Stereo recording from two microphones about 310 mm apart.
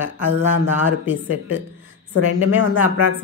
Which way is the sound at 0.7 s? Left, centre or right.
Centre.